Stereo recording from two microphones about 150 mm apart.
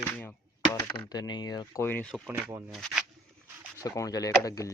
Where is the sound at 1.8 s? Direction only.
15° left (ahead or behind).